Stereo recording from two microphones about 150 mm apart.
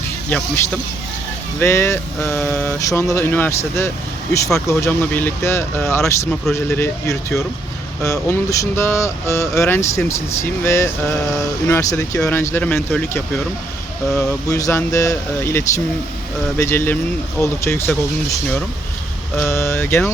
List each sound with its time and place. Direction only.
1.5 s speech: 15° left (ahead or behind)
14.5 s speech: 20° left (ahead or behind)